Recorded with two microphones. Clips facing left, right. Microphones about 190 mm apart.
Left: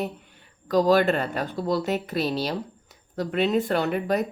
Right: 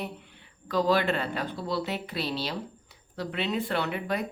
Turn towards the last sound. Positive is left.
turn(degrees=45)  # may be behind; listen again after turning